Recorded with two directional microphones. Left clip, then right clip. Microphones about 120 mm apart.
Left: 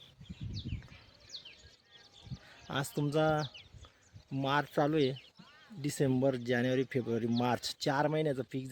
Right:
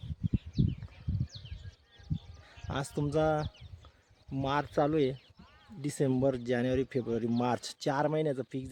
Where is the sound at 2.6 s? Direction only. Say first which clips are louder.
Even; centre (ahead or behind).